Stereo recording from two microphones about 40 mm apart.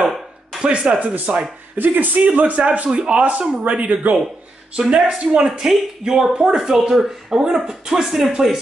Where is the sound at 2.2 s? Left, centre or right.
Right.